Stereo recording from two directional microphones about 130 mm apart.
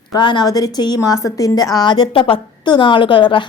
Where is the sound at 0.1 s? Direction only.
35° left (ahead or behind).